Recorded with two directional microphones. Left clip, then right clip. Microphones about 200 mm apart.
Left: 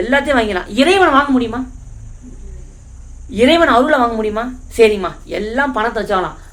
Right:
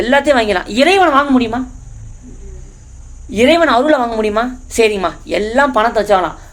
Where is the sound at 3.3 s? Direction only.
30° right (ahead or behind).